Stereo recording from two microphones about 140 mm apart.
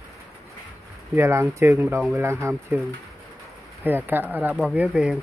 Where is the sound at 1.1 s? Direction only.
20° right (ahead or behind).